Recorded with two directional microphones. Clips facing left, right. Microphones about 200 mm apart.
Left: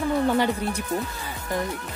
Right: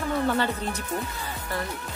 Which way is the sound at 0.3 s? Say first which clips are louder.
Left 3 dB; 10° left (ahead or behind).